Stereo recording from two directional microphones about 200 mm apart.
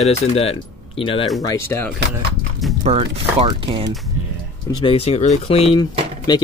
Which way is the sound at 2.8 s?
30° right (ahead or behind).